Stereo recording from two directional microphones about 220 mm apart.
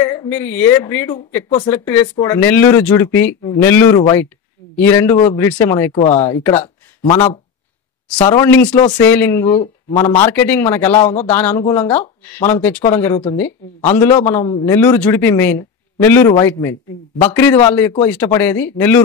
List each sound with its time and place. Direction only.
0.0 s a woman's voice: 15° left (ahead or behind)
6.6 s a sound: 25° left (ahead or behind)
8.2 s a woman's voice: 10° left (ahead or behind)